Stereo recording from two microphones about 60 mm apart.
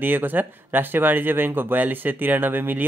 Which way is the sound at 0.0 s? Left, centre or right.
Right.